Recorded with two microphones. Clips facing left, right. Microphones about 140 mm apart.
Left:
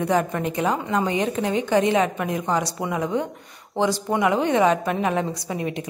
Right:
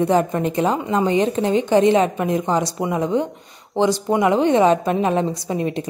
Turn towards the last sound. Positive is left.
turn(degrees=-30)  # may be behind; listen again after turning